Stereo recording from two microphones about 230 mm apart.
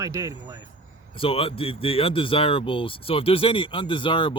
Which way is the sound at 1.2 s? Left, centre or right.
Left.